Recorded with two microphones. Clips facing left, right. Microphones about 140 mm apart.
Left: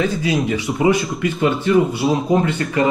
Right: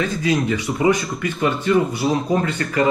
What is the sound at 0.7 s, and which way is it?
Speech, 25° left (ahead or behind).